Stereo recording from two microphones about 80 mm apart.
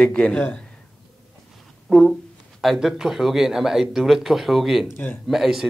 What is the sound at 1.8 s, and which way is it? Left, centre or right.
Speech, centre.